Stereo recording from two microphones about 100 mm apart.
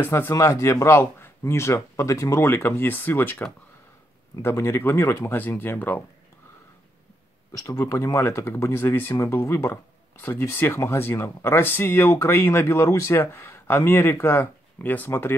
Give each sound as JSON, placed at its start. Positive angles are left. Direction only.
{"t": 0.0, "sound": "speech", "side_deg": 25}
{"t": 7.8, "sound": "speech", "side_deg": 30}